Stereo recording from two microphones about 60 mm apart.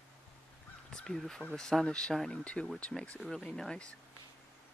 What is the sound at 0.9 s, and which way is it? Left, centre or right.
Speech, centre.